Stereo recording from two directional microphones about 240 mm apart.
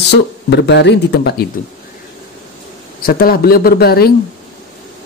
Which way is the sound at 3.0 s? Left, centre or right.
Left.